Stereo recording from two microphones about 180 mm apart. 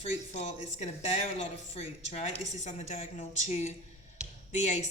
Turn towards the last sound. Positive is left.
turn(degrees=40)  # may be behind; listen again after turning